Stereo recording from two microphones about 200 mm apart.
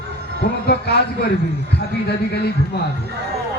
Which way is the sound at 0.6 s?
55° left (ahead or behind).